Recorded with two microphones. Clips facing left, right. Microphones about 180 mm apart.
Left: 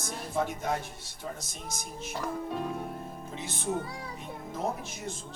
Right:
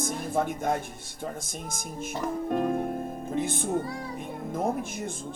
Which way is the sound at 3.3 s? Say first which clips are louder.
Right 6 dB; 50° right (ahead or behind).